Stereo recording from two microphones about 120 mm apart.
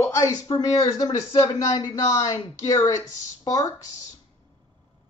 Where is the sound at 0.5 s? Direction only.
30° left (ahead or behind).